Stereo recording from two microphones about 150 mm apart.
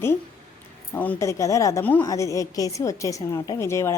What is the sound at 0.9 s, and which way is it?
A woman's voice, 10° left (ahead or behind).